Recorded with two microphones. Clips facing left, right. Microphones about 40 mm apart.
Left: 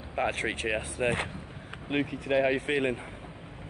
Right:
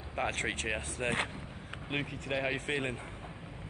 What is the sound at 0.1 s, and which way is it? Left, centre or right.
Speech, centre.